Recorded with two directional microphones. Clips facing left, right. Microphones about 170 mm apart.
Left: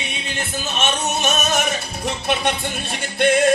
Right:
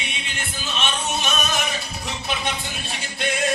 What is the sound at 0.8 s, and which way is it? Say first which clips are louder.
Music: left 4 dB; 50° left (ahead or behind).